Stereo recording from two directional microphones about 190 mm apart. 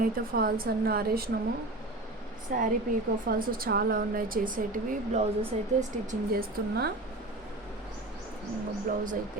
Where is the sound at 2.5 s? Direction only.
45° right (ahead or behind).